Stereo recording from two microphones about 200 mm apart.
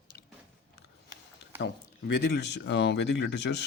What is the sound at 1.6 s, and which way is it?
Speech, 60° left (ahead or behind).